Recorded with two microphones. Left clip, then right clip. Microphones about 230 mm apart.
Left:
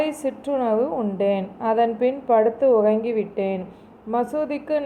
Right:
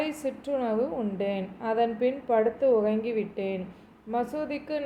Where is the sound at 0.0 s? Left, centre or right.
Centre.